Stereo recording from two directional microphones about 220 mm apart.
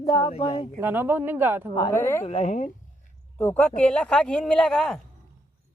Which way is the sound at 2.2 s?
30° left (ahead or behind).